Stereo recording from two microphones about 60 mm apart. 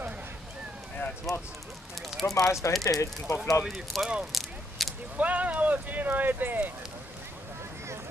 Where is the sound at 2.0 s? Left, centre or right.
Centre.